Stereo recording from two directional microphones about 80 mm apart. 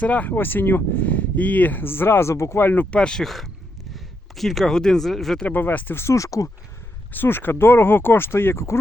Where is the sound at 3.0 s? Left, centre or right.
Centre.